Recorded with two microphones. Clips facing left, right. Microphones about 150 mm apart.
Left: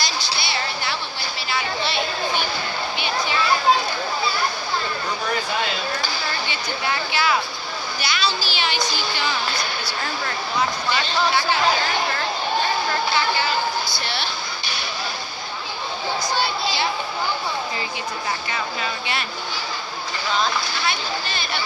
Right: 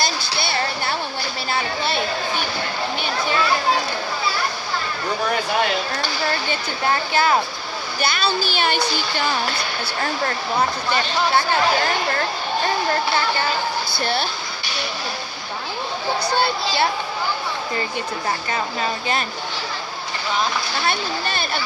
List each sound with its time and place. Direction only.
6.5 s a sound: 45° right (ahead or behind)
8.0 s speech: 50° right (ahead or behind)
14.0 s speech: 50° right (ahead or behind)
16.3 s a sound: 60° right (ahead or behind)
18.5 s speech: 40° right (ahead or behind)
20.8 s speech: 50° right (ahead or behind)